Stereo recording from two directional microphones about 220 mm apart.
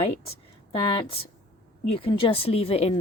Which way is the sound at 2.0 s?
25° left (ahead or behind).